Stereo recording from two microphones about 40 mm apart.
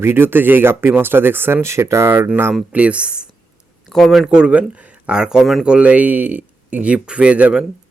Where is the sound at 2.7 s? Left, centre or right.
Right.